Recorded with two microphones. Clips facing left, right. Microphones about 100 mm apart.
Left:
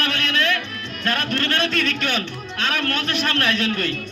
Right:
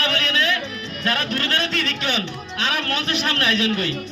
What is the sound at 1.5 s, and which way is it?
A man's voice, 55° left (ahead or behind).